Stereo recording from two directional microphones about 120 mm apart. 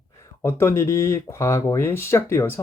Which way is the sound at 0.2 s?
20° left (ahead or behind).